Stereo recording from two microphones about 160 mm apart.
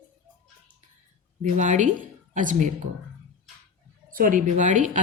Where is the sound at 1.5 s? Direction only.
50° right (ahead or behind).